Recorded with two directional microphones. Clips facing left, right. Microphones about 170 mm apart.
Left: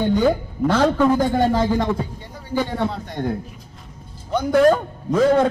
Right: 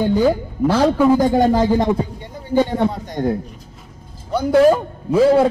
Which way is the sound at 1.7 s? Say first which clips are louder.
Right 4 dB; 20° right (ahead or behind).